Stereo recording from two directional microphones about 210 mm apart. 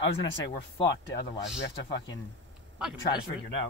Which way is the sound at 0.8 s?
25° left (ahead or behind).